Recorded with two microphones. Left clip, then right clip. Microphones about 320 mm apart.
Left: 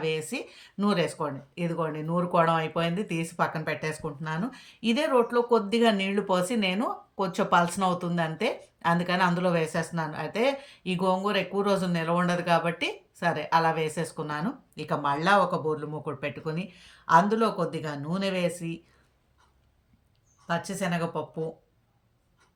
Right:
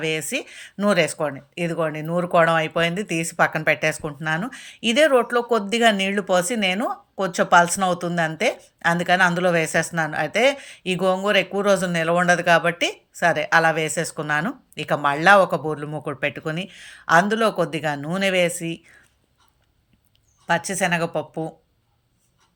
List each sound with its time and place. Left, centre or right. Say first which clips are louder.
0.8 s speech: right 8 dB; centre
20.5 s speech: right 9 dB; centre